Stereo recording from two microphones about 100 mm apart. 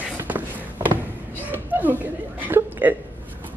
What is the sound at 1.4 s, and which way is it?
Chuckle, 20° right (ahead or behind).